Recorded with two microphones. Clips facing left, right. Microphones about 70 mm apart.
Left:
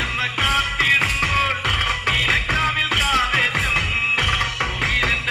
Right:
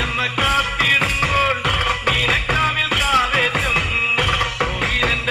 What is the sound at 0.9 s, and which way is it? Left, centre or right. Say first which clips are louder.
Music: right 2 dB; right.